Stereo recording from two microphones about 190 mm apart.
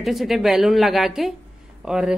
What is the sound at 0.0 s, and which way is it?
A woman's voice, centre (ahead or behind).